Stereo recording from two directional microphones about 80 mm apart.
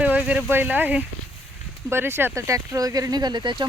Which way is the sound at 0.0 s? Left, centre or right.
Centre.